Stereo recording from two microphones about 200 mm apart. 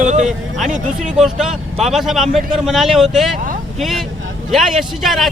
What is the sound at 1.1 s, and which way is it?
A man's voice, 5° right (ahead or behind).